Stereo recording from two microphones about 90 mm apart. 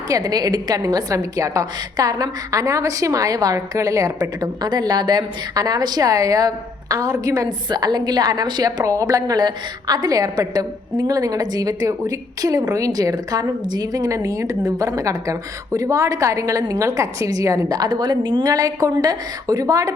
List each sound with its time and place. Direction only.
0.1 s a woman's voice: 45° right (ahead or behind)
8.8 s a woman's voice: 35° right (ahead or behind)